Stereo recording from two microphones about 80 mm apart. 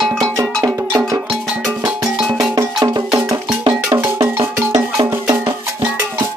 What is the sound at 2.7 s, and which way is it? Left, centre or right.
Music, right.